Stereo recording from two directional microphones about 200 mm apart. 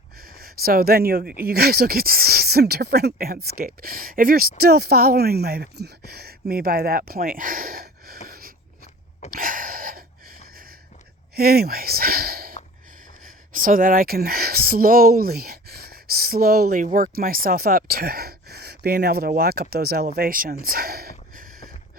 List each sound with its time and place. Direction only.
0.2 s speech: 50° right (ahead or behind)
8.3 s a sound: 45° right (ahead or behind)
11.3 s speech: 50° right (ahead or behind)